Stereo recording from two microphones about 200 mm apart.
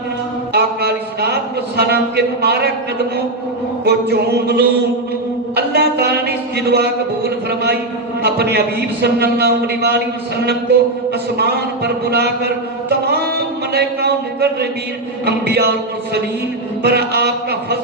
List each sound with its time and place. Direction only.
0.5 s a man's voice: 55° right (ahead or behind)
3.8 s a sound: 55° right (ahead or behind)
5.5 s a man's voice: 55° right (ahead or behind)
8.2 s a man's voice: 55° right (ahead or behind)
11.3 s a man's voice: 55° right (ahead or behind)
16.8 s a man's voice: 55° right (ahead or behind)